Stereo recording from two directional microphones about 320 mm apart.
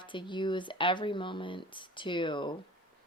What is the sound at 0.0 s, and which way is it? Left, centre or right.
Speech, centre.